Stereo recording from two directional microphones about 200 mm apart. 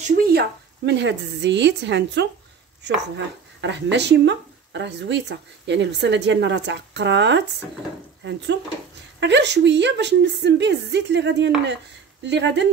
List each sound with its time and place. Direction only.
0.3 s speech: 55° right (ahead or behind)
3.6 s speech: 60° right (ahead or behind)